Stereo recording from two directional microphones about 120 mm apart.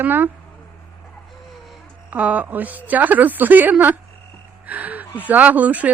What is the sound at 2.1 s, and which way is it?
A woman's voice, 10° right (ahead or behind).